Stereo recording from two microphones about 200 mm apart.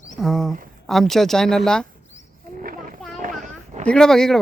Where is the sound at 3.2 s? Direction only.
40° right (ahead or behind).